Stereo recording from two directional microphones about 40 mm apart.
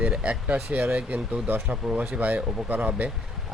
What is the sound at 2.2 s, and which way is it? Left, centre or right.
Speech, right.